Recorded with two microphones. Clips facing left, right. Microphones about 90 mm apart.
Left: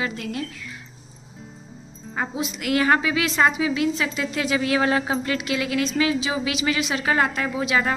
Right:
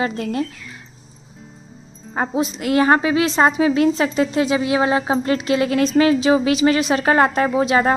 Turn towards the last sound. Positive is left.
turn(degrees=-40)  # may be behind; listen again after turning